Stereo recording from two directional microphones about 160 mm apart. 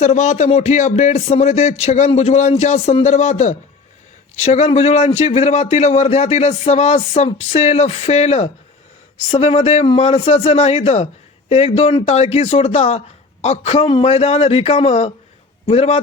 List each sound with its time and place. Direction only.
0.0 s speech: 45° left (ahead or behind)